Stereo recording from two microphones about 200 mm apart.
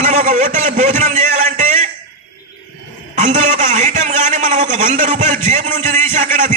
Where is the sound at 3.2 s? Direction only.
35° right (ahead or behind).